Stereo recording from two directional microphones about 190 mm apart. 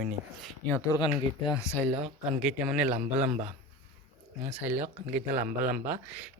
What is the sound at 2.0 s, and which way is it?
Speech, 5° right (ahead or behind).